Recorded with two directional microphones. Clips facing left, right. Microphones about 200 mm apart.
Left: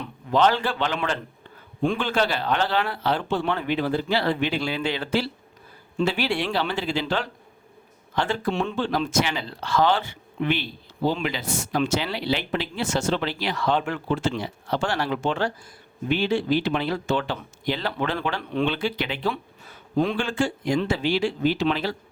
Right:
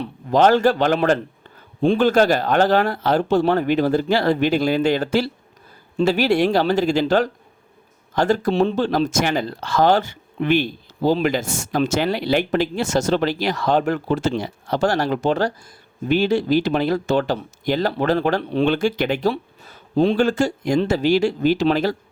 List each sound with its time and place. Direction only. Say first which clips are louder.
0.0 s speech: right 5 dB; 40° right (ahead or behind)